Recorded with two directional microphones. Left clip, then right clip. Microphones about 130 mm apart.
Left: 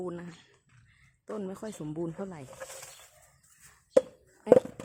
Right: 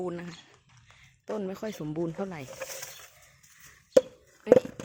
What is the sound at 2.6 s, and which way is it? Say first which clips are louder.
Speech: right 4 dB; 90° right.